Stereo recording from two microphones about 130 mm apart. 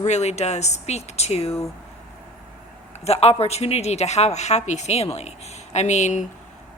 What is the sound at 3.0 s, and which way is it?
A woman's voice, 50° left (ahead or behind).